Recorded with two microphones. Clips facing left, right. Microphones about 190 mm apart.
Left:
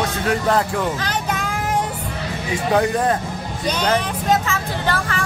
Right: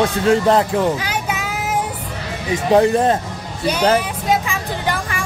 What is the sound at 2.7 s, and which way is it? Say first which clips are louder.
Speech: right 5 dB; 25° right (ahead or behind).